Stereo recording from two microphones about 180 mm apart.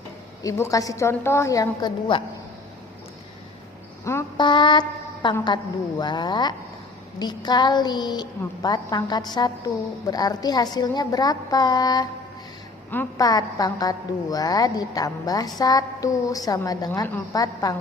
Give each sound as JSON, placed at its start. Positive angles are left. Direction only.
{"t": 0.4, "sound": "a woman's voice", "side_deg": 20}
{"t": 4.0, "sound": "a sound", "side_deg": 15}
{"t": 4.4, "sound": "a woman's voice", "side_deg": 25}